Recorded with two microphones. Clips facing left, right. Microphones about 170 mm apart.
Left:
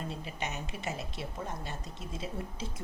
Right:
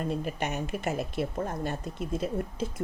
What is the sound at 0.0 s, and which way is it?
Speech, 55° right (ahead or behind).